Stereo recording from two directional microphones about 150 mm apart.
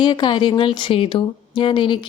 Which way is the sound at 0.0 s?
30° left (ahead or behind).